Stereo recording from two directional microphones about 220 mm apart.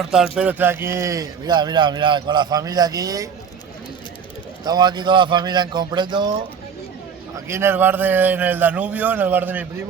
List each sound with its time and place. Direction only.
0.0 s a man's voice: centre (ahead or behind)
4.6 s a man's voice: 20° right (ahead or behind)
7.4 s a man's voice: 10° right (ahead or behind)